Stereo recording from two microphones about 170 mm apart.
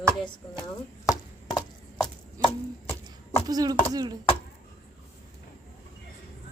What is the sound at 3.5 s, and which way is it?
Speech, 20° right (ahead or behind).